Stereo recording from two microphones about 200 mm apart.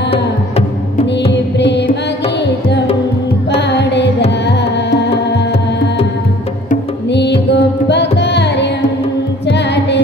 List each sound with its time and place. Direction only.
1.3 s music: 60° left (ahead or behind)
3.5 s music: 60° left (ahead or behind)
4.5 s tabla: 60° left (ahead or behind)
7.1 s music: 60° left (ahead or behind)
8.2 s carnatic music: 60° left (ahead or behind)
9.5 s music: 60° left (ahead or behind)